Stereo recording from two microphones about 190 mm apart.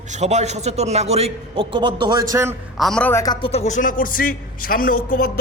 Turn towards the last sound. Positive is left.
turn(degrees=50)  # may be behind; listen again after turning